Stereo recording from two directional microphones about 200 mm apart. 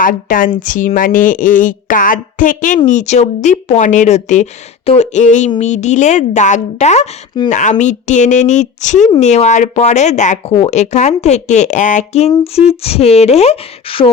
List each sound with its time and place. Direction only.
0.0 s a woman's voice: 45° left (ahead or behind); by 14.1 s 25° left (ahead or behind)